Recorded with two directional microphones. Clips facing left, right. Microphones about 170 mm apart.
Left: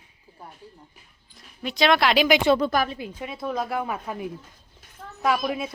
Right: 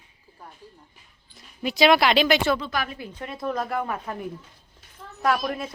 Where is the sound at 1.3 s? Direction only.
5° right (ahead or behind).